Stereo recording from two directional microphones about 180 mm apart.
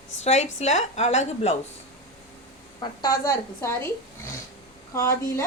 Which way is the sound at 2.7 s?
20° left (ahead or behind).